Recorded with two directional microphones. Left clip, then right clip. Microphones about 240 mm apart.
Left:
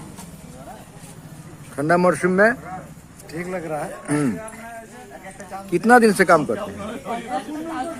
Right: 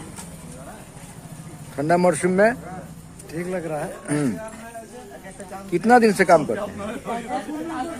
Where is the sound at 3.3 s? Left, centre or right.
Centre.